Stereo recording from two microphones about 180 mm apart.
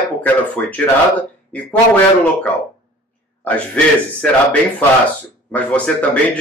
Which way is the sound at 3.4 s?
5° left (ahead or behind).